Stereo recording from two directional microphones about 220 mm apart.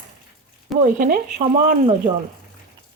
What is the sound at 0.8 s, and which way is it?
Speech, 35° right (ahead or behind).